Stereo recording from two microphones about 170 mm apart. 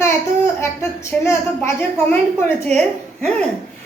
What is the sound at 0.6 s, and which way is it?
A woman's voice, 15° left (ahead or behind).